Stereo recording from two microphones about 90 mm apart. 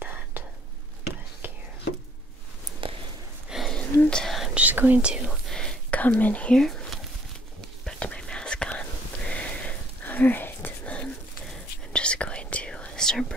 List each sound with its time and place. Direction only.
0.0 s whispering: 20° right (ahead or behind)
2.8 s a sound: 75° right (ahead or behind)
3.4 s a sound: 5° right (ahead or behind)
3.7 s a sound: 5° left (ahead or behind)
4.6 s whispering: 20° right (ahead or behind)
5.3 s whispering: 5° left (ahead or behind)
5.9 s speech: 15° left (ahead or behind)
7.8 s whispering: 10° left (ahead or behind)
11.4 s whispering: 10° left (ahead or behind)